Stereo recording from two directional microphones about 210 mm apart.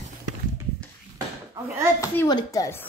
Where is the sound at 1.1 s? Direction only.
15° right (ahead or behind).